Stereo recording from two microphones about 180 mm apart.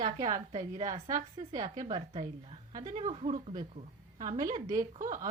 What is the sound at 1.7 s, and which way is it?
Speech, 20° right (ahead or behind).